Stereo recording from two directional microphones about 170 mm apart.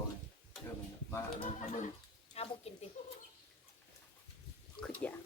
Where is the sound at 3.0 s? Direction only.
45° left (ahead or behind).